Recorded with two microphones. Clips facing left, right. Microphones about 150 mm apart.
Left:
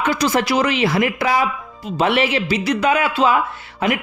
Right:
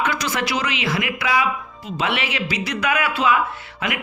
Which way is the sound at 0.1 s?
30° left (ahead or behind).